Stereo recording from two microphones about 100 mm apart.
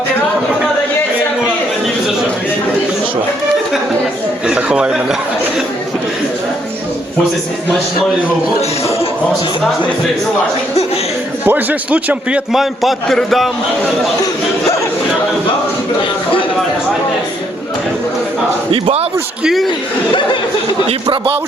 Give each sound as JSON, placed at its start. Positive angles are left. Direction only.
{"t": 4.4, "sound": "speech", "side_deg": -10}
{"t": 11.4, "sound": "a man's voice", "side_deg": -15}
{"t": 12.5, "sound": "a man's voice", "side_deg": 0}
{"t": 18.7, "sound": "speech", "side_deg": -80}